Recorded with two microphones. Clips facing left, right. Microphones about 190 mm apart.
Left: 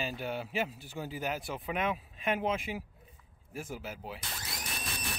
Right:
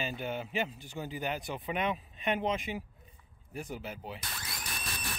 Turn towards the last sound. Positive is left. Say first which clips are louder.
# left 1 dB
turn(degrees=25)  # may be behind; listen again after turning